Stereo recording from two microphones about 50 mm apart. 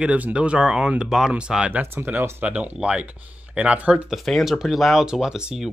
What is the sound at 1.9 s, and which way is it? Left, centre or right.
Speech, right.